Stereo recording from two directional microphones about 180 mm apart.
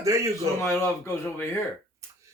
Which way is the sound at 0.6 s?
15° left (ahead or behind).